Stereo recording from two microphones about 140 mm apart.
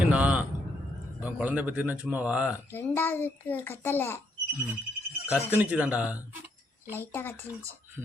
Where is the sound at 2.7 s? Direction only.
15° left (ahead or behind).